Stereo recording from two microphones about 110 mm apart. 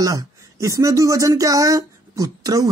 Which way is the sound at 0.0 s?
30° right (ahead or behind).